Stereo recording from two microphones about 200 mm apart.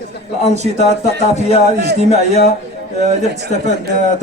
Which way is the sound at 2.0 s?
35° right (ahead or behind).